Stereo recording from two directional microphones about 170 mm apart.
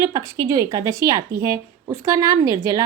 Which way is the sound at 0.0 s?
20° right (ahead or behind).